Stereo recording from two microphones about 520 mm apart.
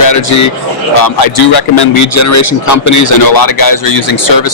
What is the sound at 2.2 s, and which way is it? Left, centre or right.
Speech, left.